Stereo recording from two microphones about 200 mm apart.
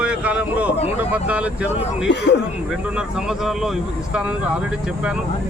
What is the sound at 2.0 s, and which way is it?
Speech, 60° left (ahead or behind).